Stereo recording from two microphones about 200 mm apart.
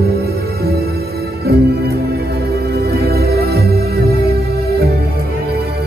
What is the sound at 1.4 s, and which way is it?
Music, 50° right (ahead or behind).